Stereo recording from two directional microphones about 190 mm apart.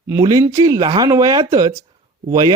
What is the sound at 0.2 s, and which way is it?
Speech, 20° right (ahead or behind).